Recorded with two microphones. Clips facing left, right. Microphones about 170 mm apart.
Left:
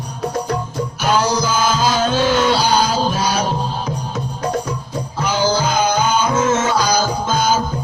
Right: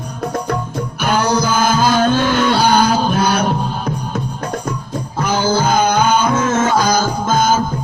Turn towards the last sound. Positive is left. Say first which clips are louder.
# right 2 dB
turn(degrees=-50)  # may be behind; listen again after turning